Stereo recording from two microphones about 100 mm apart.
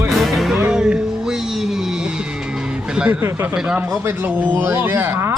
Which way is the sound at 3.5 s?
5° right (ahead or behind).